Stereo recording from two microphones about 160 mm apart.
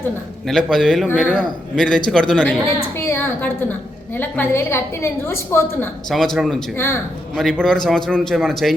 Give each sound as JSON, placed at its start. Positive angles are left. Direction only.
{"t": 0.4, "sound": "a man's voice", "side_deg": 5}
{"t": 6.1, "sound": "a man's voice", "side_deg": 0}
{"t": 6.7, "sound": "a woman's voice", "side_deg": 15}
{"t": 7.3, "sound": "a man's voice", "side_deg": 0}